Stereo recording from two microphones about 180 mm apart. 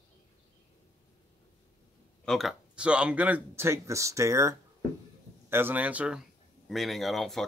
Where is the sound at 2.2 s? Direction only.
Centre (ahead or behind).